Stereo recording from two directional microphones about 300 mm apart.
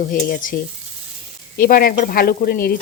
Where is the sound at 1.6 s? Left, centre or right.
Left.